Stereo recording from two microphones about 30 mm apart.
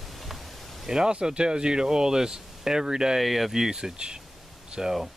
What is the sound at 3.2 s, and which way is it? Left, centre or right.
Speech, centre.